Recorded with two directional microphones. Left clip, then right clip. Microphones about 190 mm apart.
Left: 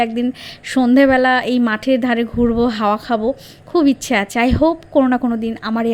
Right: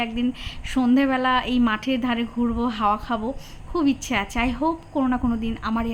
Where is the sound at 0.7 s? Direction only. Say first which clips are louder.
Left 9 dB; 30° left (ahead or behind).